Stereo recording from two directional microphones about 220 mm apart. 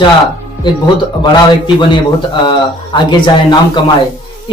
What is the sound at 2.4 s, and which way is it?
Speech, 20° left (ahead or behind).